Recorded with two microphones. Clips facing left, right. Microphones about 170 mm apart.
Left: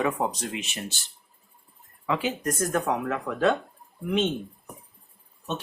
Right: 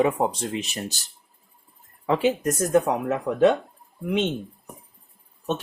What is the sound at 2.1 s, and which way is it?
Speech, 30° right (ahead or behind).